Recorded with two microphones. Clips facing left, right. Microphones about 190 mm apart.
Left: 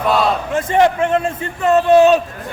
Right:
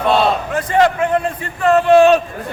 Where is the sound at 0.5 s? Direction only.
25° left (ahead or behind).